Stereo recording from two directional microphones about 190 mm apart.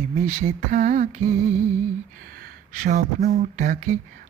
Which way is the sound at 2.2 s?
50° right (ahead or behind).